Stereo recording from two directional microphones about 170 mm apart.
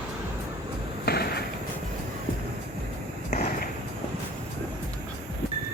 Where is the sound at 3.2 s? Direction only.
45° left (ahead or behind).